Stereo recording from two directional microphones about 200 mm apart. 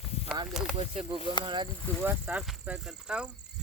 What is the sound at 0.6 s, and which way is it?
Speech, 5° right (ahead or behind).